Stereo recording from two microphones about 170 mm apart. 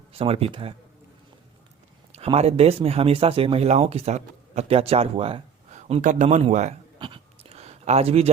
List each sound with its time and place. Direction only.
0.1 s speech: 35° right (ahead or behind)
2.1 s speech: 35° right (ahead or behind)
5.9 s speech: 45° right (ahead or behind)
7.0 s a sound: 30° right (ahead or behind)